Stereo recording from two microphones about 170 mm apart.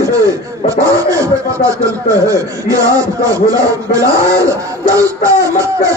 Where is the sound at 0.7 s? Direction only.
20° right (ahead or behind).